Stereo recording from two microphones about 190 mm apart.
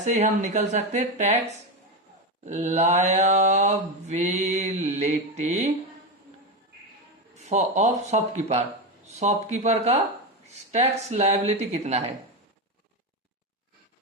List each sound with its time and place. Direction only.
0.0 s mantra: 40° right (ahead or behind)
7.5 s mantra: 35° right (ahead or behind)